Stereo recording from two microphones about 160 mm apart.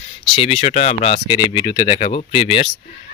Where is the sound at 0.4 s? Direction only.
45° left (ahead or behind).